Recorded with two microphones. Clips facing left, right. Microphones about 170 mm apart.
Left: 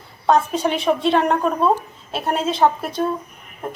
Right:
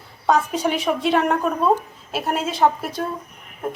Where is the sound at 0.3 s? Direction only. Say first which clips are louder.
Left 2 dB; 10° right (ahead or behind).